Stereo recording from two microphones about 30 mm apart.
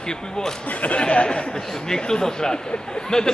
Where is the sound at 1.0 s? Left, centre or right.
Left.